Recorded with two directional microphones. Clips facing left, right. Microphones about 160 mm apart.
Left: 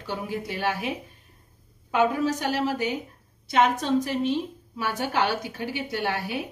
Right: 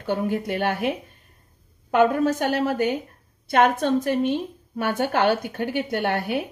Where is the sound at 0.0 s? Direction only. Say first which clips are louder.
Right 7 dB; 55° right (ahead or behind).